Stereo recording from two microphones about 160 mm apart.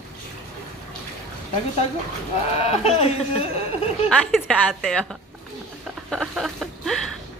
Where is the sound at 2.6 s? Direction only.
40° left (ahead or behind).